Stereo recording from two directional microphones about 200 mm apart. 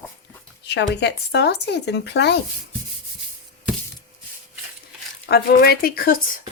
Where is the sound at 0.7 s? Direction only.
60° left (ahead or behind).